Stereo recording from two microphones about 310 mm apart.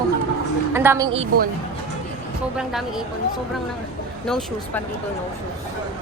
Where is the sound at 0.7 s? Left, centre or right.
Centre.